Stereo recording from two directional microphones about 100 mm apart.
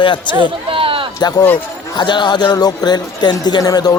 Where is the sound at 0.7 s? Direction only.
65° right (ahead or behind).